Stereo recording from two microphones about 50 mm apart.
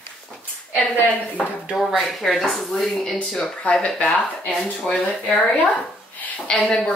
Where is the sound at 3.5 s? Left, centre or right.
Left.